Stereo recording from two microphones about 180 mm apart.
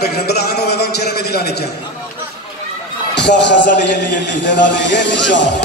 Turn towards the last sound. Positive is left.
turn(degrees=85)